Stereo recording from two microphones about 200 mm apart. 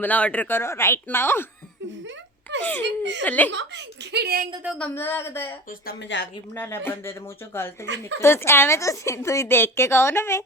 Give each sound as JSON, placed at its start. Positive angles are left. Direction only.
{"t": 0.0, "sound": "a woman's voice", "side_deg": 5}
{"t": 2.5, "sound": "giggle", "side_deg": -65}
{"t": 2.8, "sound": "speech", "side_deg": -60}
{"t": 3.2, "sound": "a woman's voice", "side_deg": 10}
{"t": 3.5, "sound": "speech", "side_deg": -60}
{"t": 4.6, "sound": "speech", "side_deg": 0}
{"t": 4.9, "sound": "a woman's voice", "side_deg": 10}
{"t": 5.8, "sound": "speech", "side_deg": 55}
{"t": 6.6, "sound": "a woman's voice", "side_deg": 10}